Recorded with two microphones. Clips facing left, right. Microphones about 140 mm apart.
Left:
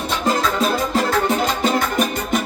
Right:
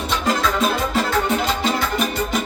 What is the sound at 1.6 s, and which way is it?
Music, 45° left (ahead or behind).